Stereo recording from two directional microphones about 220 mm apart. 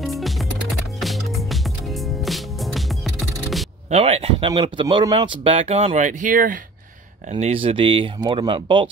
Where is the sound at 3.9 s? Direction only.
30° right (ahead or behind).